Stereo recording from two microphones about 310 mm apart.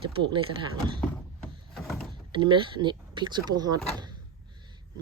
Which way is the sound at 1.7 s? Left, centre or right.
Centre.